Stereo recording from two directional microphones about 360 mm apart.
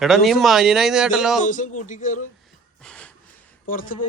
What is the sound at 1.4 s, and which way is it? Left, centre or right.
Speech, left.